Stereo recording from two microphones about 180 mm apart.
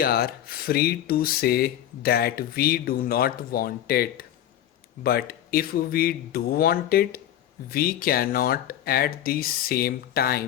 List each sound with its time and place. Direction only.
0.0 s speech: 55° left (ahead or behind)